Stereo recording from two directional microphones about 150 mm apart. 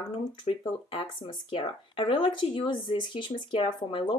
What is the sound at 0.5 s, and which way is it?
Speech, 35° left (ahead or behind).